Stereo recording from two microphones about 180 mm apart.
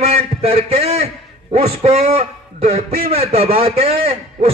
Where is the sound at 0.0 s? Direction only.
35° right (ahead or behind).